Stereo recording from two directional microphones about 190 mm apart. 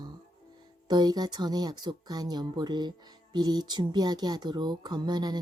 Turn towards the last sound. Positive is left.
turn(degrees=-20)  # may be behind; listen again after turning